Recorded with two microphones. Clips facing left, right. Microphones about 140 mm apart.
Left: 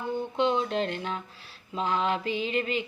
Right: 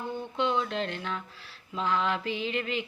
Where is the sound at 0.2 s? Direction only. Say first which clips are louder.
Left 2 dB; 20° left (ahead or behind).